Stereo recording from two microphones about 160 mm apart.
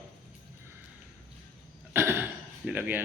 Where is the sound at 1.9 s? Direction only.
15° right (ahead or behind).